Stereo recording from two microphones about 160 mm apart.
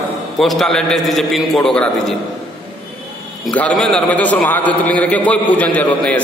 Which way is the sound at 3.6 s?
5° left (ahead or behind).